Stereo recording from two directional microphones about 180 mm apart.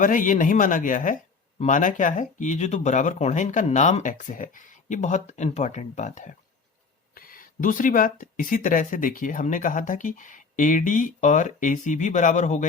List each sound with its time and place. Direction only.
0.0 s speech: 45° left (ahead or behind)